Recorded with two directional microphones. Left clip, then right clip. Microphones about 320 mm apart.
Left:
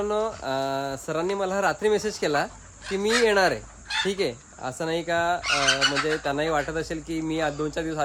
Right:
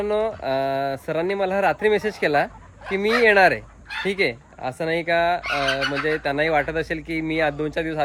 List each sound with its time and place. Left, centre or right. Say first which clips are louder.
0.0 s speech: right 4 dB; centre
5.4 s squawk: even; left
6.2 s speech: right 4 dB; centre